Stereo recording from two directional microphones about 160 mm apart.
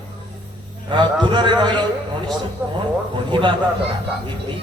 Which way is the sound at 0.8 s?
30° right (ahead or behind).